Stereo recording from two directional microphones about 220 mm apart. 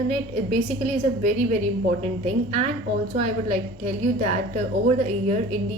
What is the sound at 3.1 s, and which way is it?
A woman's voice, 30° right (ahead or behind).